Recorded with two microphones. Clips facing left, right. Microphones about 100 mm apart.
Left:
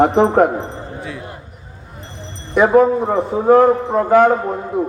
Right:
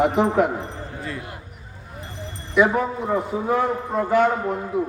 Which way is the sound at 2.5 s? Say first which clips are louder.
Left 8 dB; 45° left (ahead or behind).